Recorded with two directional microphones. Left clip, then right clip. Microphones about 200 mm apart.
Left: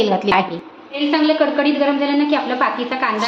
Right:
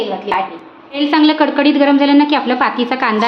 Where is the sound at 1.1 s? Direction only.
55° right (ahead or behind).